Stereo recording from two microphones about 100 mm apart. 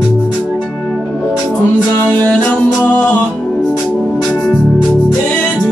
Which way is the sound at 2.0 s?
15° left (ahead or behind).